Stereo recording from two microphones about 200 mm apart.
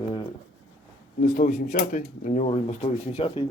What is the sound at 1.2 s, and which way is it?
Speech, 40° left (ahead or behind).